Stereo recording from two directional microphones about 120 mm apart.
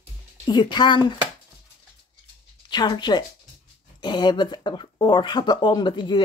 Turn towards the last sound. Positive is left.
turn(degrees=40)  # may be behind; listen again after turning